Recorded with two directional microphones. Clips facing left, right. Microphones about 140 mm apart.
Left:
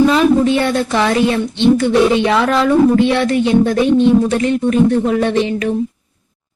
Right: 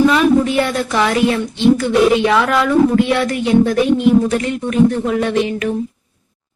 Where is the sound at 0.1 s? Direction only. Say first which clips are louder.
Left 1 dB; 30° left (ahead or behind).